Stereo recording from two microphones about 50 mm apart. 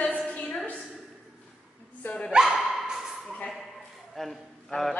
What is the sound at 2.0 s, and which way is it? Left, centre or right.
Speech, left.